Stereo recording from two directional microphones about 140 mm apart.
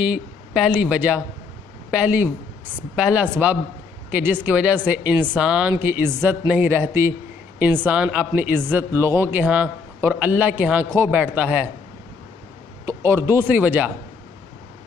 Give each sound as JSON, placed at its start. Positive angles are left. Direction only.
{"t": 0.0, "sound": "speech", "side_deg": -5}
{"t": 12.8, "sound": "speech", "side_deg": -20}